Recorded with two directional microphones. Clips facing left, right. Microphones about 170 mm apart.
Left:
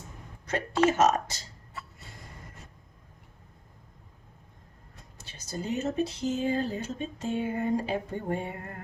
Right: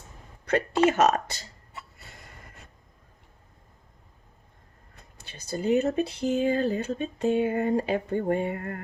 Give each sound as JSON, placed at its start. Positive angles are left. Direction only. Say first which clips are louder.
{"t": 0.9, "sound": "speech", "louder": "even", "side_deg": -65}
{"t": 5.1, "sound": "speech", "louder": "right 4 dB", "side_deg": -60}